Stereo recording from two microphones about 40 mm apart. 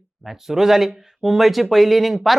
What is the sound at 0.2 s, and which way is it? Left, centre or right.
Speech, centre.